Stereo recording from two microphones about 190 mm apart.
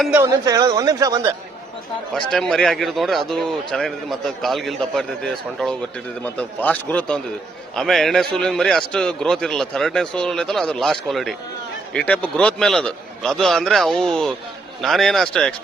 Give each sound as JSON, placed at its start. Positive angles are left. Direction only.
{"t": 0.2, "sound": "speech", "side_deg": -20}
{"t": 2.1, "sound": "a man's voice", "side_deg": 5}